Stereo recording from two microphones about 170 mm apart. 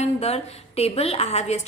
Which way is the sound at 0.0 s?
40° left (ahead or behind).